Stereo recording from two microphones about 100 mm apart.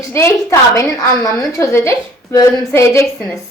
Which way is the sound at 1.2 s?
35° left (ahead or behind).